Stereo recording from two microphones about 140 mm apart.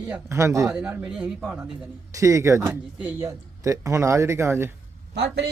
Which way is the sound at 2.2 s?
20° right (ahead or behind).